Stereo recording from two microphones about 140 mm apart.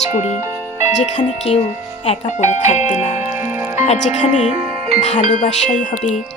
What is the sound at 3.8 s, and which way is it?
Speech, 55° left (ahead or behind).